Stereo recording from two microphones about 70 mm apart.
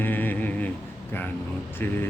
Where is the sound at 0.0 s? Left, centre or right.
Left.